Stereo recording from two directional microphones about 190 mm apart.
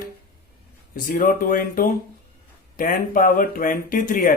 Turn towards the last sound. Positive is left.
turn(degrees=50)  # may be behind; listen again after turning